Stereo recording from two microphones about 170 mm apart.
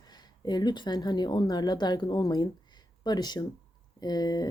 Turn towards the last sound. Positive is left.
turn(degrees=25)  # may be behind; listen again after turning